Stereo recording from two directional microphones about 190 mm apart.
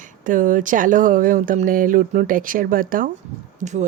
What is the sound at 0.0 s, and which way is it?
Speech, 45° right (ahead or behind).